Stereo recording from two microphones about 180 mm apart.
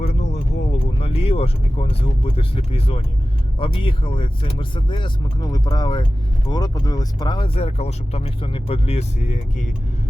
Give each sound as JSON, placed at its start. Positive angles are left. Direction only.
{"t": 0.1, "sound": "speech", "side_deg": 40}